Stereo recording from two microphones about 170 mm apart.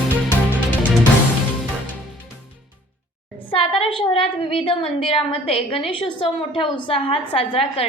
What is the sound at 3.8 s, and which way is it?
A woman's voice, 30° left (ahead or behind).